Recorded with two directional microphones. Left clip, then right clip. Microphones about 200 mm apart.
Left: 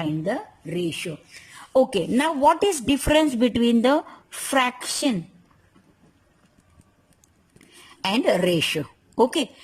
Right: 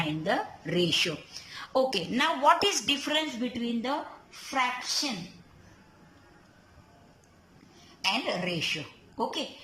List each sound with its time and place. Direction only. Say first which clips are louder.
0.0 s speech: left 2 dB; 25° left (ahead or behind)
1.5 s a woman's voice: left 7 dB; 40° left (ahead or behind); by 5.1 s 55° left (ahead or behind)
8.0 s a woman's voice: left 8 dB; 50° left (ahead or behind)